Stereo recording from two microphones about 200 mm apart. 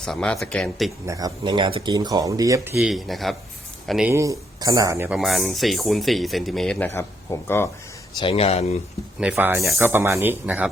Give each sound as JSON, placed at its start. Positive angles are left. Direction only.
{"t": 0.0, "sound": "speech", "side_deg": 5}
{"t": 1.0, "sound": "speech", "side_deg": -15}
{"t": 2.7, "sound": "speech", "side_deg": 0}
{"t": 4.2, "sound": "speech", "side_deg": -15}
{"t": 5.1, "sound": "speech", "side_deg": 0}
{"t": 8.2, "sound": "speech", "side_deg": 30}
{"t": 9.2, "sound": "speech", "side_deg": -5}